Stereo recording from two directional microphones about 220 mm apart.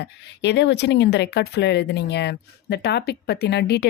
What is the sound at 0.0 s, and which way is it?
Speech, 50° left (ahead or behind).